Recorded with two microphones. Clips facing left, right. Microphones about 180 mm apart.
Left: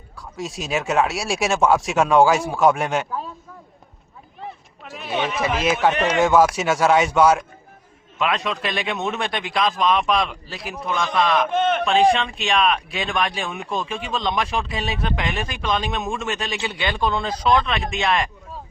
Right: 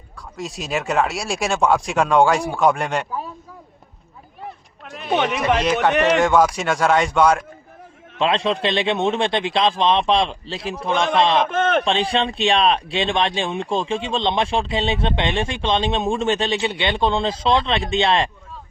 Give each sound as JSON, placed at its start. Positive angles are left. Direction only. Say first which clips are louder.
{"t": 0.2, "sound": "speech", "louder": "even", "side_deg": 0}
{"t": 4.9, "sound": "chatter", "louder": "right 3 dB", "side_deg": 0}
{"t": 5.8, "sound": "speech", "louder": "even", "side_deg": 5}
{"t": 8.2, "sound": "speech", "louder": "right 4 dB", "side_deg": -30}